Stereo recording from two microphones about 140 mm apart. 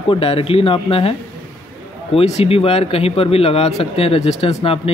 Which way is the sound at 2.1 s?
45° left (ahead or behind).